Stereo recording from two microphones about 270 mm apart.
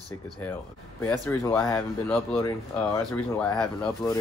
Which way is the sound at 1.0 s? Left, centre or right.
Centre.